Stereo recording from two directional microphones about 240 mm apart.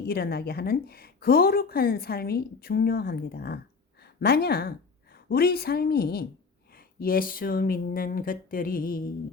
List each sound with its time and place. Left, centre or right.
0.1 s a woman's voice: left